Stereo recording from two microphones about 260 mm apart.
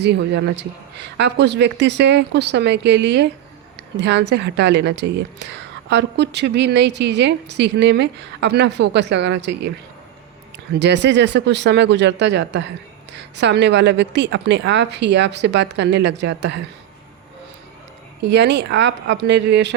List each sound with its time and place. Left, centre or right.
0.0 s a woman's voice: right
10.8 s a woman's voice: right
18.2 s a woman's voice: right